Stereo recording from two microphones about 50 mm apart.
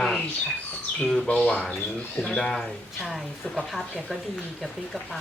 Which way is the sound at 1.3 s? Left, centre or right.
Left.